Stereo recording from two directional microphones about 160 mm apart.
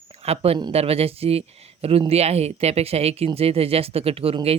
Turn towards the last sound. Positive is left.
turn(degrees=-35)  # may be behind; listen again after turning